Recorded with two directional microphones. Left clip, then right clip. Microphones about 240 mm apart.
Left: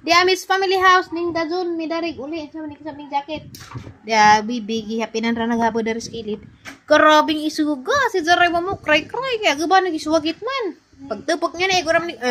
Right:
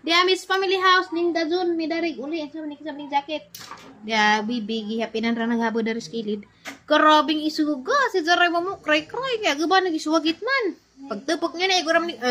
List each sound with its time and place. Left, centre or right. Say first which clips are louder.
0.0 s a woman's voice: left 4 dB; left
3.1 s a woman's voice: left 1 dB; centre
4.1 s a woman's voice: left 6 dB; left